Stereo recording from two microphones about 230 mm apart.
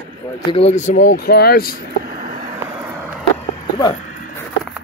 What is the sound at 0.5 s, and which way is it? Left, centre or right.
Speech, left.